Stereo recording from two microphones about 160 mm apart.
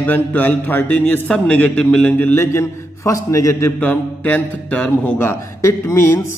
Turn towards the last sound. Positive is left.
turn(degrees=20)  # may be behind; listen again after turning